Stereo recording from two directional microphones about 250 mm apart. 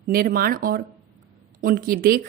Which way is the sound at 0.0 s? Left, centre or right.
Right.